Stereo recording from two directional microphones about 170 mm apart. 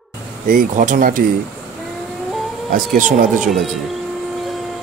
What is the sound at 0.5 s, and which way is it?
Speech, 50° right (ahead or behind).